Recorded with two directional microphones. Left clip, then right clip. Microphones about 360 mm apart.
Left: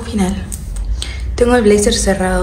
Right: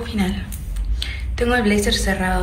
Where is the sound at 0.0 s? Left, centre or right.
Centre.